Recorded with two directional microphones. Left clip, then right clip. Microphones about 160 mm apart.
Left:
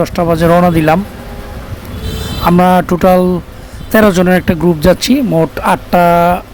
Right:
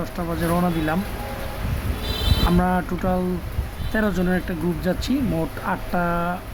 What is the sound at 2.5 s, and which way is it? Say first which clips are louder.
Speech: left 16 dB; 50° left (ahead or behind).